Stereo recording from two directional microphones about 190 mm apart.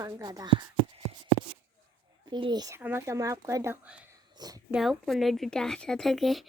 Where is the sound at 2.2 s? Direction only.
25° right (ahead or behind); by 4.2 s 5° right (ahead or behind).